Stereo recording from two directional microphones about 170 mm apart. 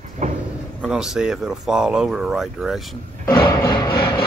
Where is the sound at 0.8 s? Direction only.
5° right (ahead or behind).